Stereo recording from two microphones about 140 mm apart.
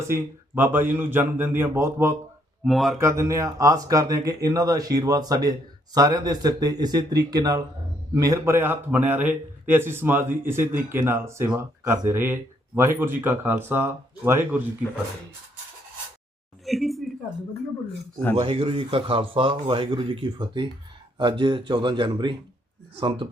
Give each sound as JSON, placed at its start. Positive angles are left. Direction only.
{"t": 0.1, "sound": "a man's voice", "side_deg": -15}
{"t": 2.6, "sound": "speech", "side_deg": 0}
{"t": 3.0, "sound": "a man's voice", "side_deg": -20}
{"t": 16.6, "sound": "a sound", "side_deg": 0}
{"t": 18.3, "sound": "a man's voice", "side_deg": -40}